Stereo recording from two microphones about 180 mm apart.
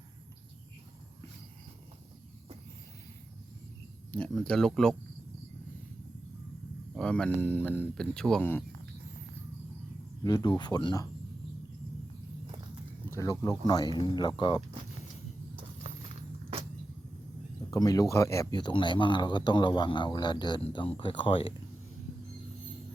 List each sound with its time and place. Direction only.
4.1 s speech: 5° left (ahead or behind)
6.9 s speech: 5° left (ahead or behind)
10.2 s a man's voice: 20° left (ahead or behind)
13.1 s a sound: 15° left (ahead or behind)
13.7 s a man's voice: 25° left (ahead or behind)
17.7 s a man's voice: 20° left (ahead or behind)